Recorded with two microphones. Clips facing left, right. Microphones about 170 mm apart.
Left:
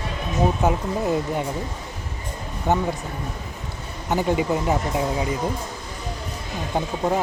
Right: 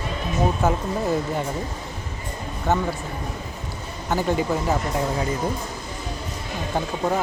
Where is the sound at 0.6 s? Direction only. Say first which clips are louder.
Even; 15° left (ahead or behind).